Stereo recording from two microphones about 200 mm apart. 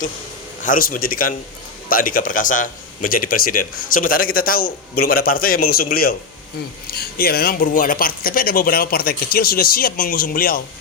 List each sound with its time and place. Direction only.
0.6 s a man's voice: 45° left (ahead or behind)